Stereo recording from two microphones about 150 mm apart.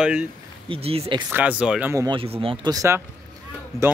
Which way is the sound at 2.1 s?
40° right (ahead or behind).